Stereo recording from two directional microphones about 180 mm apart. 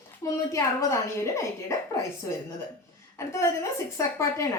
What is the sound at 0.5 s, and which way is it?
Speech, 15° left (ahead or behind).